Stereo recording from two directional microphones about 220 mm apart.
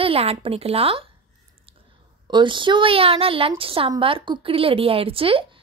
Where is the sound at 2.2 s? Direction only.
20° right (ahead or behind).